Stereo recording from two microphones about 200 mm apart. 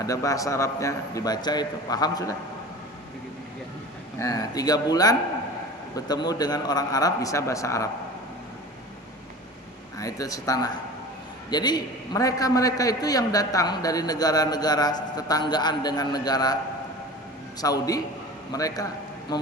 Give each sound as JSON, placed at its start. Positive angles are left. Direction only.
{"t": 0.0, "sound": "a man's voice", "side_deg": 15}
{"t": 4.2, "sound": "a man's voice", "side_deg": 15}
{"t": 10.0, "sound": "a man's voice", "side_deg": 15}
{"t": 17.6, "sound": "a man's voice", "side_deg": 20}